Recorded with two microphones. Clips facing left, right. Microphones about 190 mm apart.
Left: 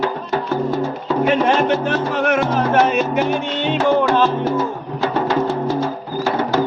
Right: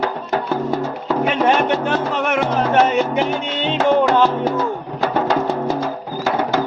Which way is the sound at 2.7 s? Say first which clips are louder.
Right 1 dB; 20° right (ahead or behind).